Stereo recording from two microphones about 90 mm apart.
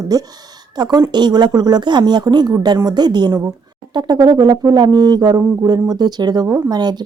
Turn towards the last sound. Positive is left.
turn(degrees=-50)  # may be behind; listen again after turning